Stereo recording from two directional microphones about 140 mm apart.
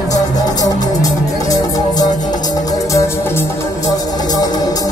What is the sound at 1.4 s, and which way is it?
Music, 25° left (ahead or behind).